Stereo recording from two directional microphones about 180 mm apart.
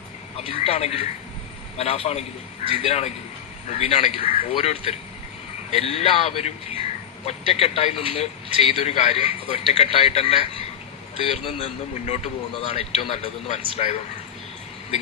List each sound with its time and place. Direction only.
0.3 s a man's voice: 30° left (ahead or behind)